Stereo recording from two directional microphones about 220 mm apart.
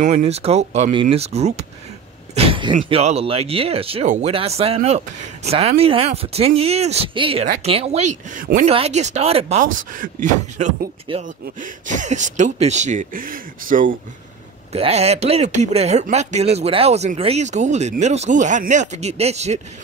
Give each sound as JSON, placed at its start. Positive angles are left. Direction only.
{"t": 0.0, "sound": "speech", "side_deg": -30}